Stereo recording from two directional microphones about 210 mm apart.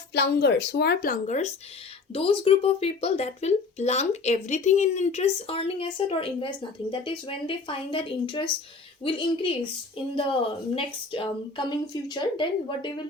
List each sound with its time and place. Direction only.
0.1 s speech: 50° left (ahead or behind); by 9.6 s 25° left (ahead or behind)
10.8 s speech: 25° left (ahead or behind)